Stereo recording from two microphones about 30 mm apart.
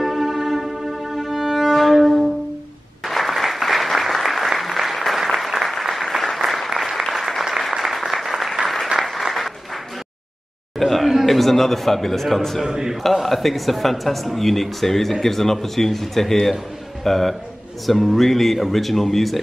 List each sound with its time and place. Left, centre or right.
0.0 s music: centre
3.1 s applause: centre
10.8 s a sound: centre
11.2 s a man's voice: centre
12.6 s a man's voice: centre
13.0 s a man's voice: centre